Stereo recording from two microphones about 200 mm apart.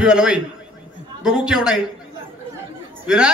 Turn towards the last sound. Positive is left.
turn(degrees=-5)  # may be behind; listen again after turning